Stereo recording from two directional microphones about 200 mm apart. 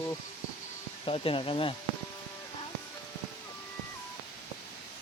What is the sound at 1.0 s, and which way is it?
Speech, 25° left (ahead or behind).